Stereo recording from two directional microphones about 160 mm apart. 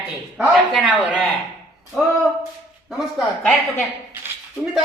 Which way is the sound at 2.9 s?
Centre (ahead or behind).